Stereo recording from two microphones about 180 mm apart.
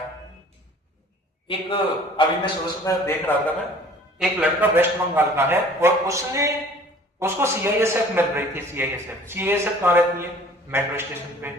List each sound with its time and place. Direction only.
1.5 s a man's voice: 30° left (ahead or behind)
2.8 s speech: 15° left (ahead or behind)
4.2 s a man's voice: 10° right (ahead or behind)